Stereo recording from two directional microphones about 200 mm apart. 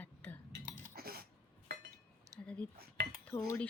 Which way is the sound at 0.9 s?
50° right (ahead or behind).